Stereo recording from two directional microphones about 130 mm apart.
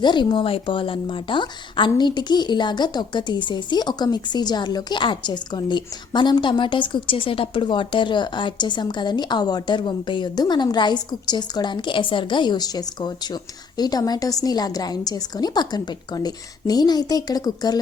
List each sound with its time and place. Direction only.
0.0 s speech: 35° left (ahead or behind)